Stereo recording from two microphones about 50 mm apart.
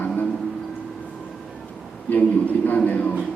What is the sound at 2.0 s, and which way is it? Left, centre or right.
A man's voice, left.